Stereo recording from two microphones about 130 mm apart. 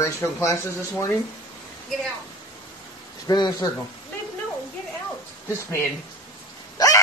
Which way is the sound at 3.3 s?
30° left (ahead or behind).